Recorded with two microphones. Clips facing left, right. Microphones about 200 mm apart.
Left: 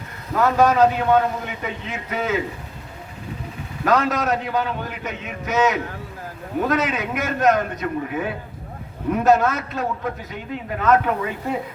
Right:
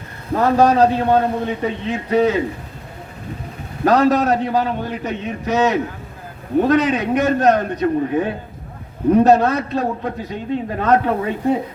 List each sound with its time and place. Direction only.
0.3 s a man's voice: 35° right (ahead or behind)
3.8 s a man's voice: 35° right (ahead or behind)